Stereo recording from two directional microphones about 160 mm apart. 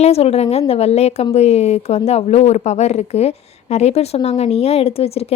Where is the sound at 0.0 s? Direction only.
40° left (ahead or behind).